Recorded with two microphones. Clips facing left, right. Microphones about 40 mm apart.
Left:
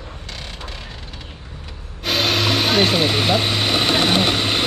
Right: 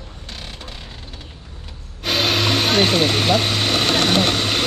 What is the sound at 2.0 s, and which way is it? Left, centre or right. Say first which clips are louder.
Vehicle: even; centre.